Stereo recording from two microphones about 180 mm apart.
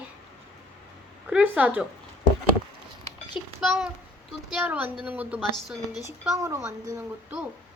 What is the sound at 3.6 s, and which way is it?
A woman's voice, centre (ahead or behind).